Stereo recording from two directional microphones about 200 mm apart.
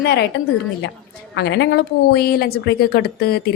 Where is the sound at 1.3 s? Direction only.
60° left (ahead or behind).